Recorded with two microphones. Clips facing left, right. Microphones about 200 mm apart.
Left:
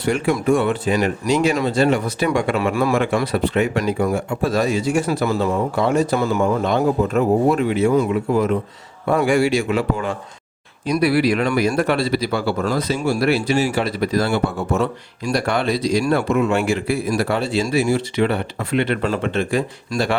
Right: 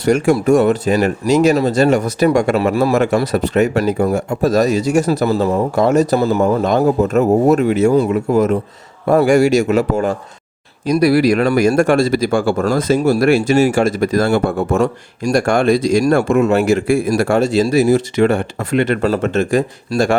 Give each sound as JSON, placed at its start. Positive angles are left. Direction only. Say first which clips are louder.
{"t": 0.0, "sound": "speech", "louder": "right 6 dB", "side_deg": -40}